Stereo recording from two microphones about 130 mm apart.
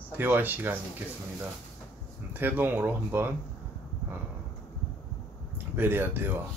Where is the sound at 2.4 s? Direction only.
15° right (ahead or behind).